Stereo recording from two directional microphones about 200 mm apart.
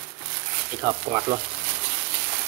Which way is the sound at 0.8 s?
15° right (ahead or behind).